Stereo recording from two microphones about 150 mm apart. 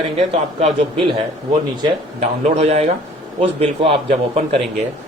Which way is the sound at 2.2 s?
45° right (ahead or behind).